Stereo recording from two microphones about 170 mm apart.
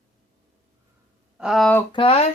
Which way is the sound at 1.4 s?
Centre (ahead or behind).